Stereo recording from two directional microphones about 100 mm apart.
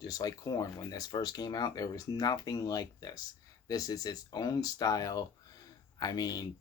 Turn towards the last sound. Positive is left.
turn(degrees=40)  # may be behind; listen again after turning